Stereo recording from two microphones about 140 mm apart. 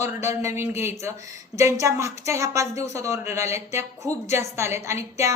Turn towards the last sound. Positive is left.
turn(degrees=-20)  # may be behind; listen again after turning